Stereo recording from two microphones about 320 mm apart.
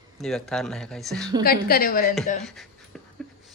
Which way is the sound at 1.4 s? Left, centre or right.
Left.